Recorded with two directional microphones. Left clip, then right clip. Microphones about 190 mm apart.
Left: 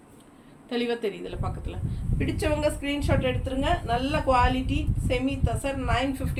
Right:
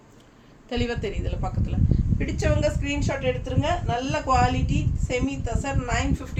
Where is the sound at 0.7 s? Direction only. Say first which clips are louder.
Left 1 dB; 25° right (ahead or behind).